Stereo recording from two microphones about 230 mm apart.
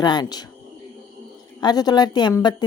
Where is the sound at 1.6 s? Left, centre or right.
Centre.